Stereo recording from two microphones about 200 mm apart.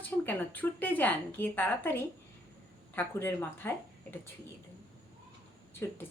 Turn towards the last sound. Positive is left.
turn(degrees=10)  # may be behind; listen again after turning